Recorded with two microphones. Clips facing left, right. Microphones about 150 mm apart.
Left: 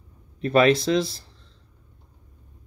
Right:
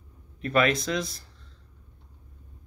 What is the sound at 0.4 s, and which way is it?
Speech, 30° left (ahead or behind).